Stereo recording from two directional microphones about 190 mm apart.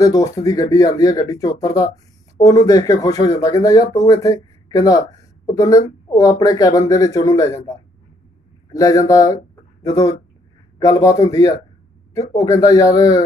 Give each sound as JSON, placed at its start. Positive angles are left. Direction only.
{"t": 0.0, "sound": "speech", "side_deg": 15}